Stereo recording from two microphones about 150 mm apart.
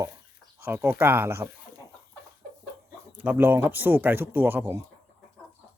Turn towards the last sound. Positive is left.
turn(degrees=-15)  # may be behind; listen again after turning